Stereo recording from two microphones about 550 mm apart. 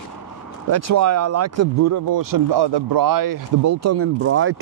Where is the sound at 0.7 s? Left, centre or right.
Right.